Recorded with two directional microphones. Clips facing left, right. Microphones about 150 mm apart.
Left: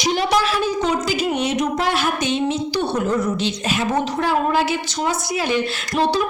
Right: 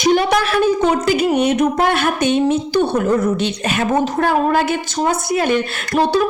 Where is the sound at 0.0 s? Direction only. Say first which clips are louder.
Right 4 dB; 55° right (ahead or behind).